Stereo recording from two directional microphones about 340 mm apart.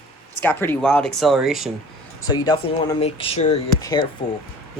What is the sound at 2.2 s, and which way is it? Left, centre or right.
Speech, centre.